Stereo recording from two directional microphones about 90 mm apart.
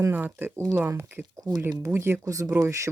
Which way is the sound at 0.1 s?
20° right (ahead or behind).